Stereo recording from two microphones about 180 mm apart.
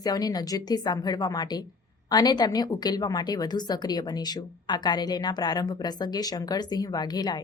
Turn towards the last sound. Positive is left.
turn(degrees=20)  # may be behind; listen again after turning